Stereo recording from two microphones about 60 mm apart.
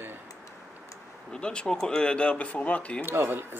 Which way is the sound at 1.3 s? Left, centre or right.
Centre.